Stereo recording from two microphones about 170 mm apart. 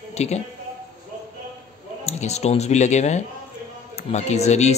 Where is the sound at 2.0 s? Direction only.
40° left (ahead or behind).